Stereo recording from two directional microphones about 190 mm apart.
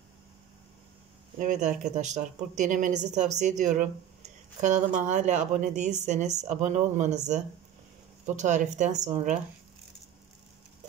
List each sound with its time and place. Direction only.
1.4 s a woman's voice: 40° right (ahead or behind)